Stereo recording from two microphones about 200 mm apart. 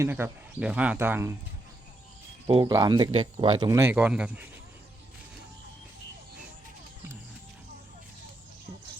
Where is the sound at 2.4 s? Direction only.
25° right (ahead or behind); by 4.5 s 5° right (ahead or behind).